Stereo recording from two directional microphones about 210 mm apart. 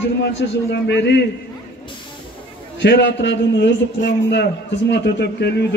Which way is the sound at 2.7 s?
55° left (ahead or behind).